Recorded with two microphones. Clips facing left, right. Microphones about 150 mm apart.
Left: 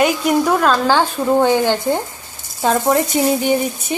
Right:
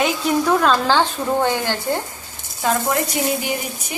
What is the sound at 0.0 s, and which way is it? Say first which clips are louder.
Speech: left 4 dB; 5° left (ahead or behind).